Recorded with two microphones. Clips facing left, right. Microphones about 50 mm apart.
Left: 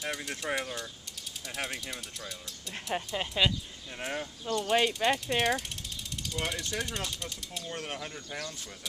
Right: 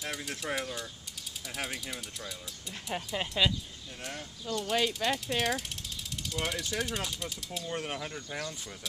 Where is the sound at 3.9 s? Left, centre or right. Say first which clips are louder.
Left 6 dB; left.